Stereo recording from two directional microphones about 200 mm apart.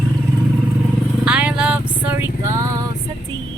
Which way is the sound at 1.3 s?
5° right (ahead or behind).